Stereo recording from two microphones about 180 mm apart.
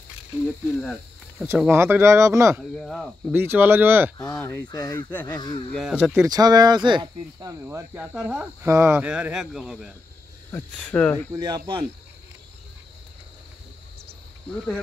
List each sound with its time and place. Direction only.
0.5 s speech: 5° left (ahead or behind)
1.7 s speech: 15° right (ahead or behind)
2.7 s speech: centre (ahead or behind)
3.3 s speech: 10° right (ahead or behind)
4.4 s speech: 10° left (ahead or behind)
5.7 s speech: centre (ahead or behind)
6.2 s speech: 20° right (ahead or behind); by 11.2 s 10° left (ahead or behind)
11.3 s speech: 25° right (ahead or behind)